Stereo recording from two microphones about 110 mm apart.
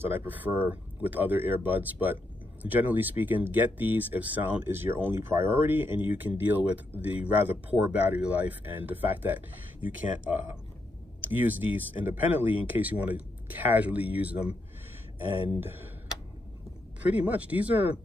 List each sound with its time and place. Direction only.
0.0 s speech: 20° right (ahead or behind)
17.0 s speech: 15° right (ahead or behind)